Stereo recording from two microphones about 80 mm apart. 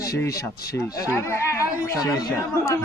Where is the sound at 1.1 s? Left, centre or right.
Left.